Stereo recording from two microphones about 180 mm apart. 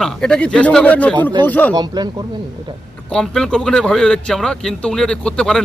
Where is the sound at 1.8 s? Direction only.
25° right (ahead or behind).